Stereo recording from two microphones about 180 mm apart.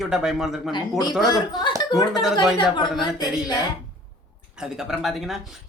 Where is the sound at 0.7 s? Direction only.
20° left (ahead or behind).